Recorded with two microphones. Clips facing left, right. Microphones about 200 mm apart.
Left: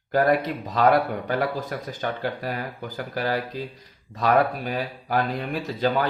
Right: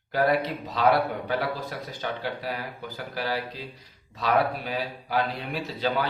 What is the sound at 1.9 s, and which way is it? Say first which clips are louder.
Speech: left 3 dB; 45° left (ahead or behind).